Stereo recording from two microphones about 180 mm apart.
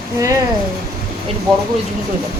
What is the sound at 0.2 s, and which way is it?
Speech, 20° right (ahead or behind).